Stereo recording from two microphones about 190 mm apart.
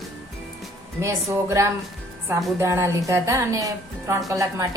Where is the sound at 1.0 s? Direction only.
15° right (ahead or behind).